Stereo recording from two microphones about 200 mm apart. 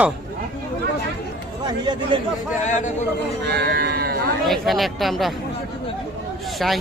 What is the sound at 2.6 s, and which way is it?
Speech, 35° left (ahead or behind).